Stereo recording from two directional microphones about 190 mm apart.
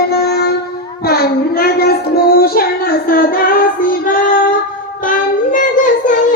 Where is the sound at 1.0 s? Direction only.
55° left (ahead or behind).